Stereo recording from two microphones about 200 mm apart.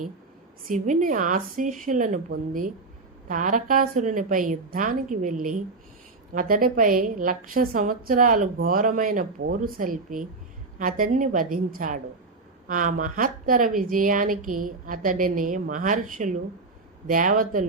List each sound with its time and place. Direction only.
0.7 s a woman's voice: 40° right (ahead or behind)